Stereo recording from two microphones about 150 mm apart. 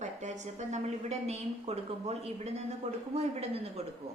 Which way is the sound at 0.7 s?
45° right (ahead or behind).